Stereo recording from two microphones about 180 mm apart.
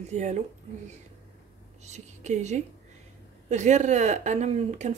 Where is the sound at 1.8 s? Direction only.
40° right (ahead or behind).